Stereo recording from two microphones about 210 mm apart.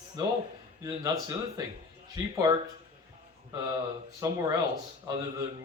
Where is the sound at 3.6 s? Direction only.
15° right (ahead or behind).